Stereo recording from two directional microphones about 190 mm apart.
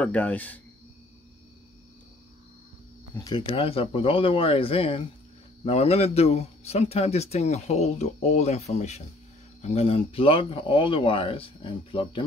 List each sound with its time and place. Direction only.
0.0 s speech: 10° left (ahead or behind)
3.3 s speech: 25° left (ahead or behind)